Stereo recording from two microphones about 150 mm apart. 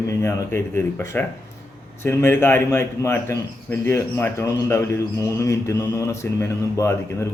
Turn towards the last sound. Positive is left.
turn(degrees=20)  # may be behind; listen again after turning